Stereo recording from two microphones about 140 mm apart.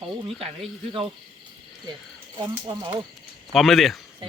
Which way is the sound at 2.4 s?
35° right (ahead or behind).